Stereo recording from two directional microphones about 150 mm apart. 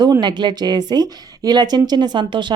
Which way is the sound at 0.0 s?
30° right (ahead or behind).